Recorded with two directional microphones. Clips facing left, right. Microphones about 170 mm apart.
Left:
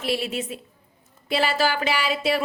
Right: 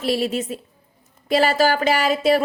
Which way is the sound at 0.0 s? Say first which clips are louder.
Right 5 dB; 40° right (ahead or behind).